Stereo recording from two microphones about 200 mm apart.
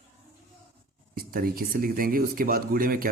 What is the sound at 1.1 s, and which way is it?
A man's voice, 45° right (ahead or behind).